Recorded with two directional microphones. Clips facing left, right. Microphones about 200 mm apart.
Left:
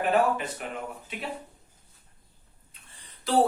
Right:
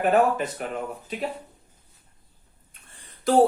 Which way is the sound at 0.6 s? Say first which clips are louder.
Right 5 dB; 40° right (ahead or behind).